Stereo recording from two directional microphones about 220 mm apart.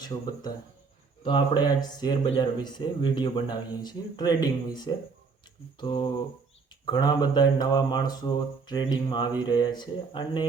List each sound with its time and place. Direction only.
0.0 s speech: 20° left (ahead or behind)